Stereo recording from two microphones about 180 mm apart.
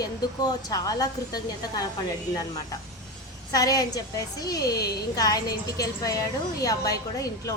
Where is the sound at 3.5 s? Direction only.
20° left (ahead or behind).